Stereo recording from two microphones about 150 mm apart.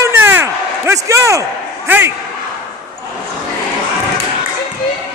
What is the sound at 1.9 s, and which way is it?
Speech, 15° right (ahead or behind).